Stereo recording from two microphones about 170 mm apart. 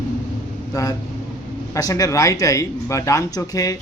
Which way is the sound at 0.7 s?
20° left (ahead or behind).